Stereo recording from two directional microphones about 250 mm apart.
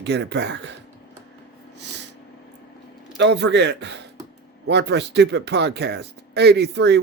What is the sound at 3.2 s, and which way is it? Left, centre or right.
Speech, right.